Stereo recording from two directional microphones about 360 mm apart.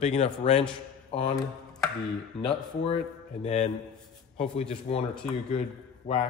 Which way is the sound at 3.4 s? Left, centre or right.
Centre.